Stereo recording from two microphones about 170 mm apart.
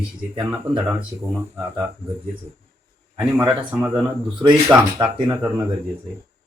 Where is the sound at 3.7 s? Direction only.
10° right (ahead or behind).